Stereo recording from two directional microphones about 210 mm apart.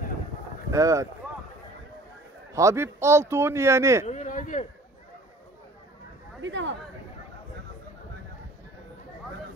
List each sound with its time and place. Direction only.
0.7 s speech: 15° right (ahead or behind)
2.5 s a man's voice: 15° right (ahead or behind)
4.1 s speech: 35° left (ahead or behind)
6.4 s speech: 60° right (ahead or behind)